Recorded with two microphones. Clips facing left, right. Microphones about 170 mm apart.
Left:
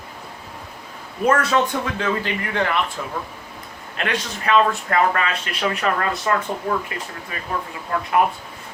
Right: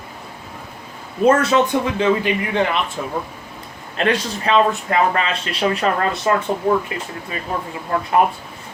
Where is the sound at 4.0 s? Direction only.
30° right (ahead or behind).